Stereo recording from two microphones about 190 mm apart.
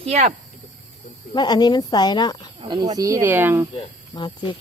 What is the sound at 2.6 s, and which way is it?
Speech, 30° right (ahead or behind).